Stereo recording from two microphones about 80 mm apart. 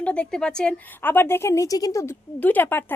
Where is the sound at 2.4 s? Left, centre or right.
Left.